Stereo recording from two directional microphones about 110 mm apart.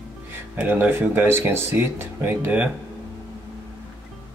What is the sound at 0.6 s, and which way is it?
Speech, 15° right (ahead or behind).